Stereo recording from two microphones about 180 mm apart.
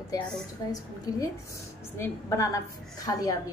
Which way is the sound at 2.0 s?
15° left (ahead or behind).